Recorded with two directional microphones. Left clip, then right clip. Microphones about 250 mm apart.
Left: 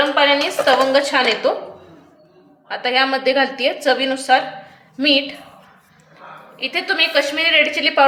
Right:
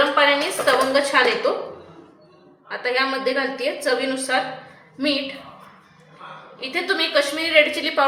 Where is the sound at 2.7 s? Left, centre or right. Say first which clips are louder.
Left 4 dB; left.